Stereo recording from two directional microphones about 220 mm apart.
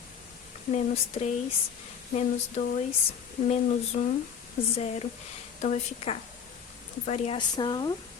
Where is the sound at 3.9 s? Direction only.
35° left (ahead or behind).